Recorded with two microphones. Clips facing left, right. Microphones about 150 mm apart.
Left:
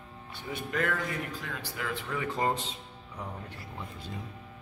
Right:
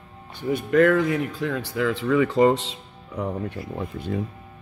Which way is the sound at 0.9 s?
90° right.